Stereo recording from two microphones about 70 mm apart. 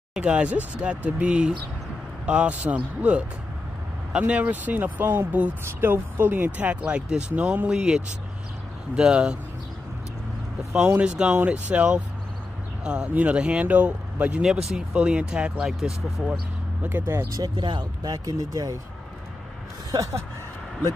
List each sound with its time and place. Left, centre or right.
0.1 s speech: centre
4.3 s speech: centre
10.9 s speech: centre
14.4 s speech: centre
17.0 s speech: right
17.3 s speech: right